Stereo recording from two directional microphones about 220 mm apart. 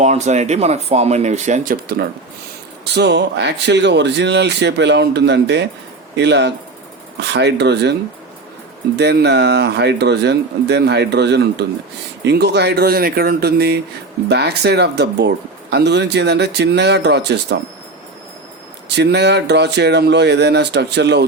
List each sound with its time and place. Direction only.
0.0 s speech: 30° right (ahead or behind); by 7.9 s 50° right (ahead or behind)
9.0 s speech: 50° right (ahead or behind)
18.9 s speech: 50° right (ahead or behind)